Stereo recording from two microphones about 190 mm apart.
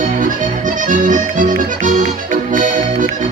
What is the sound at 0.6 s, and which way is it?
Music, 45° right (ahead or behind).